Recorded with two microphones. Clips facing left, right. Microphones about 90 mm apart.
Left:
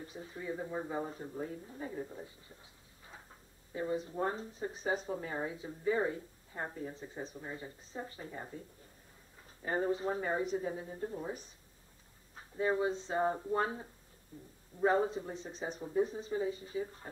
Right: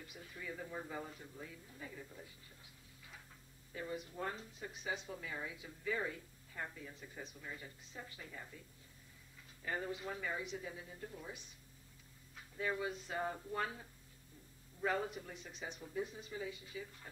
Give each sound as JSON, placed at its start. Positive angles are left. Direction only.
{"t": 0.0, "sound": "speech", "side_deg": 30}
{"t": 3.7, "sound": "speech", "side_deg": 30}